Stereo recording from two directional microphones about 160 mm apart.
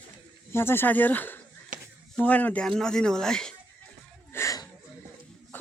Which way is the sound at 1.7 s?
55° right (ahead or behind).